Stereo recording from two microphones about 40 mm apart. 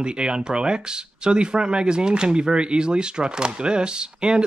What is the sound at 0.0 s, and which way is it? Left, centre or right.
Speech, right.